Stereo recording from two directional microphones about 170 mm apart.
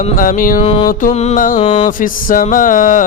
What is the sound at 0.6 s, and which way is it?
Music, 35° left (ahead or behind).